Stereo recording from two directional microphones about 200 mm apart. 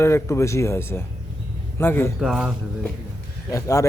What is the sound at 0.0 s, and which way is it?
Speech, 15° left (ahead or behind).